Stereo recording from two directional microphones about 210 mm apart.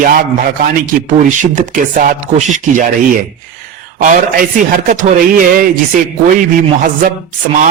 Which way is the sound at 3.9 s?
40° right (ahead or behind).